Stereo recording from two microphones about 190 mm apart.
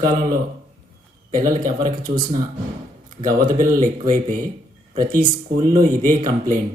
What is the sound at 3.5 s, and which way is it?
Speech, 45° right (ahead or behind).